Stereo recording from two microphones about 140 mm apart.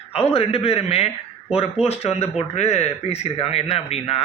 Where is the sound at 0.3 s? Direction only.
45° left (ahead or behind).